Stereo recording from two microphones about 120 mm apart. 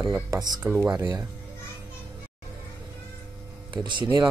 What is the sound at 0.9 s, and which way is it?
Speech, 30° right (ahead or behind).